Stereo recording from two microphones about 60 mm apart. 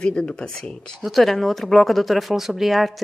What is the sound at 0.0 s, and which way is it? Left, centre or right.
Speech, centre.